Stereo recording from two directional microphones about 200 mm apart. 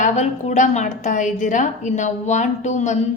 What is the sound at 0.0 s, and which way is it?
A woman's voice, 35° left (ahead or behind).